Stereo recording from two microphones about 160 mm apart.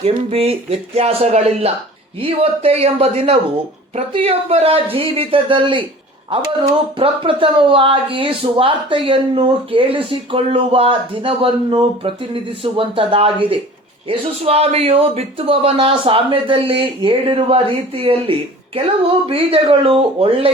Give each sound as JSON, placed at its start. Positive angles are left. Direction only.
{"t": 0.0, "sound": "speech", "side_deg": -40}
{"t": 6.9, "sound": "speech", "side_deg": -35}